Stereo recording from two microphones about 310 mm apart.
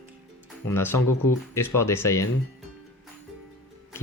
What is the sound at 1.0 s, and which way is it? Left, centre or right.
Speech, left.